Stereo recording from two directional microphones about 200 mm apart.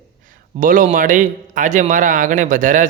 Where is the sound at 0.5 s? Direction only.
45° right (ahead or behind).